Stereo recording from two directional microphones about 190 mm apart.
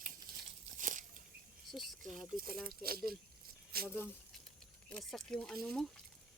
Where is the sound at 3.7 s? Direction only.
55° right (ahead or behind).